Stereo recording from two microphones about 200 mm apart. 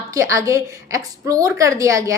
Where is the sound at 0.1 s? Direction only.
15° right (ahead or behind).